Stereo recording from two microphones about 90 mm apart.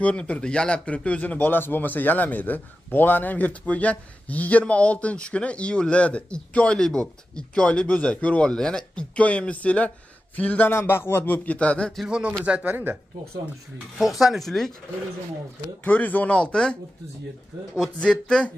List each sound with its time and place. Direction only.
0.0 s a man's voice: 15° left (ahead or behind)
12.0 s speech: 10° right (ahead or behind)
13.9 s speech: 5° right (ahead or behind)
15.8 s a man's voice: 20° left (ahead or behind)
17.7 s a man's voice: 5° left (ahead or behind)